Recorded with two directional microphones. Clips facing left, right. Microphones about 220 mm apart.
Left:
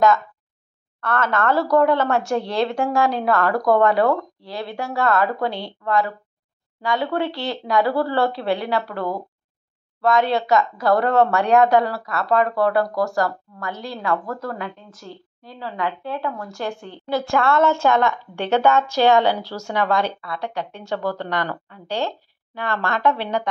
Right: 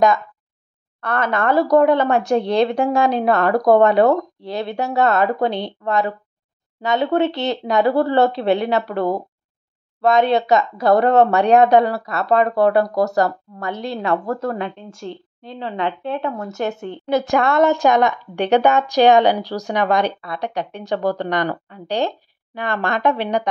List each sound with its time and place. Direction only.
1.0 s speech: 15° right (ahead or behind)